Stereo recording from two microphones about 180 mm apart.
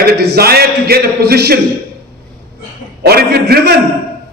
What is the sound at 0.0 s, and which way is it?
A man's voice, 60° right (ahead or behind).